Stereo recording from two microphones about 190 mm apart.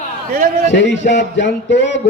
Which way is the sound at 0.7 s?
70° left (ahead or behind).